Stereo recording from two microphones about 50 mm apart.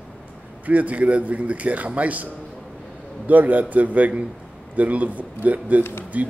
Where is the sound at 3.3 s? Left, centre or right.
Right.